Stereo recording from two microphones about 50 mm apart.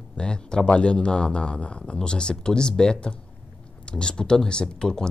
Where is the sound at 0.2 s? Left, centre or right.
Centre.